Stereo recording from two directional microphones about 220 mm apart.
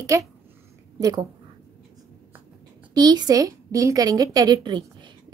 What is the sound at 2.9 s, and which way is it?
A woman's voice, 20° right (ahead or behind).